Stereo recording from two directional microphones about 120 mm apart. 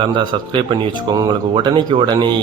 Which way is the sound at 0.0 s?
45° right (ahead or behind).